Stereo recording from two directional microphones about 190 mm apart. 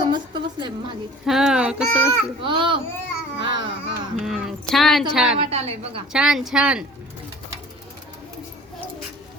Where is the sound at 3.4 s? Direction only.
25° right (ahead or behind).